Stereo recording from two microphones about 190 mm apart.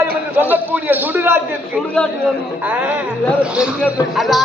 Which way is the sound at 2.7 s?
10° right (ahead or behind).